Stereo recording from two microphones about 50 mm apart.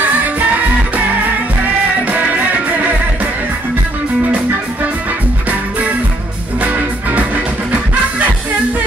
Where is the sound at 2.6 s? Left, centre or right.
Right.